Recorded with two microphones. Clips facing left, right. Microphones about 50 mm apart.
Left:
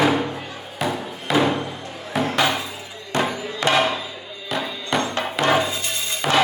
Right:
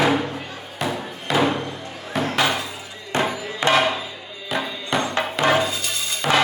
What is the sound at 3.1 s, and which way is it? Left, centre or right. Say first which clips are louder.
Music: even; right.